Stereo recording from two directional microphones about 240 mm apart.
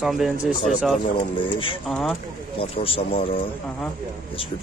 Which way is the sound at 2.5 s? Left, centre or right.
Left.